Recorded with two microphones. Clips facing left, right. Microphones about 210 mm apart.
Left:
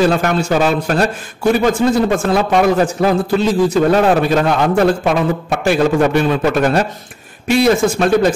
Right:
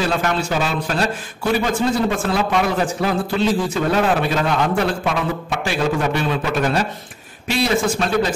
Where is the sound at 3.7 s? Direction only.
45° left (ahead or behind).